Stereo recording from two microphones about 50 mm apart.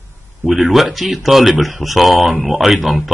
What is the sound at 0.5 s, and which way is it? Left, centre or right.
Speech, centre.